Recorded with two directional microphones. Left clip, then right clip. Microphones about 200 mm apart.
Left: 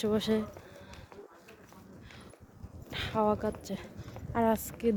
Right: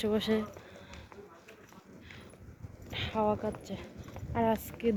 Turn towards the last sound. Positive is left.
turn(degrees=20)  # may be behind; listen again after turning